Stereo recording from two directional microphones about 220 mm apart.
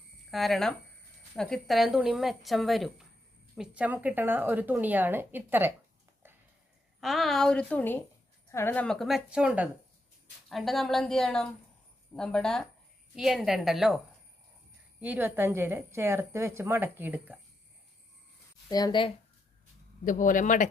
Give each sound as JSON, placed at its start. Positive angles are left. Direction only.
{"t": 0.3, "sound": "a woman's voice", "side_deg": 0}
{"t": 7.0, "sound": "a woman's voice", "side_deg": 0}
{"t": 15.0, "sound": "a woman's voice", "side_deg": -10}
{"t": 18.7, "sound": "speech", "side_deg": 20}
{"t": 20.1, "sound": "speech", "side_deg": 35}